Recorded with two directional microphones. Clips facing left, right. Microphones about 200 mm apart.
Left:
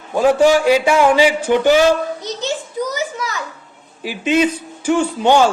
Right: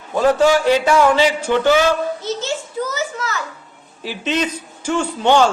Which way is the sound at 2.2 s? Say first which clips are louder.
Even; 15° left (ahead or behind).